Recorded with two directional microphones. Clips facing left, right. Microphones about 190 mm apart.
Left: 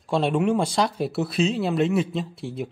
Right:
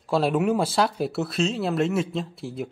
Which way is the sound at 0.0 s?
5° right (ahead or behind).